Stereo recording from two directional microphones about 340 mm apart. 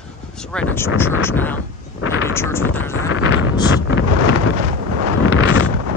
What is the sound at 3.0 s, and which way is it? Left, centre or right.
Wind noise, left.